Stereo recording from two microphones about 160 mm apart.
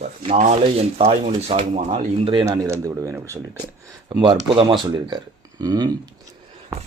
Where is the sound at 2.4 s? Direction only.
20° right (ahead or behind).